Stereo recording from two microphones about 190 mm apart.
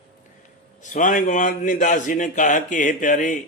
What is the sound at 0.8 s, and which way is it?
A man's voice, 40° left (ahead or behind).